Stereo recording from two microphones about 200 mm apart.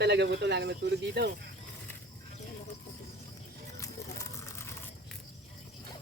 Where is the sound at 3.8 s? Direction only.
15° left (ahead or behind).